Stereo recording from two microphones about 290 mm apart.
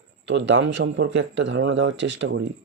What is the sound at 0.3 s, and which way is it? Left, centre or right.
Speech, right.